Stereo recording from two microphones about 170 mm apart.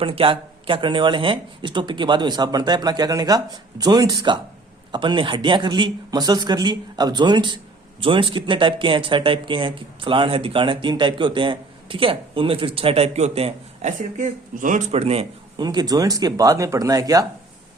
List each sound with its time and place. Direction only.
0.0 s speech: 30° right (ahead or behind); by 14.8 s 50° right (ahead or behind)
14.9 s speech: 35° right (ahead or behind)
15.5 s speech: 25° right (ahead or behind)